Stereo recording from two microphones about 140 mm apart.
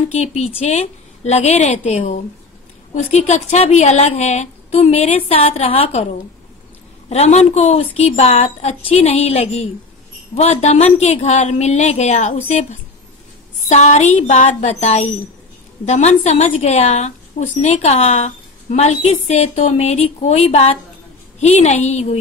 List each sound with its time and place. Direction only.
0.1 s a woman's voice: 50° left (ahead or behind)
7.1 s a woman's voice: 50° left (ahead or behind)
13.7 s a woman's voice: 55° left (ahead or behind)